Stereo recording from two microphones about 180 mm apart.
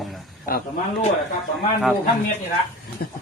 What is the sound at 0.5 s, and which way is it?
Speech, 55° left (ahead or behind).